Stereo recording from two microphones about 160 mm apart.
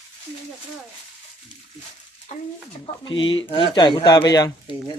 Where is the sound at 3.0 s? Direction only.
30° left (ahead or behind).